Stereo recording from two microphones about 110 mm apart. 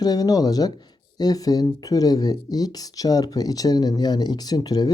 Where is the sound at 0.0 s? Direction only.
35° left (ahead or behind).